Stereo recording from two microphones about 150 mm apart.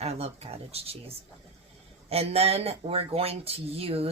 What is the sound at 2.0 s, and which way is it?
Speech, 40° right (ahead or behind).